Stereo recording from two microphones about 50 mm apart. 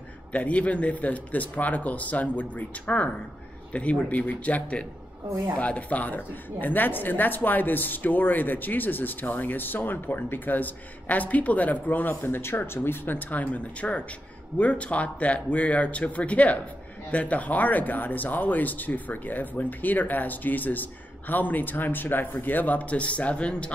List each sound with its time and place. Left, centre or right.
0.3 s a woman's voice: left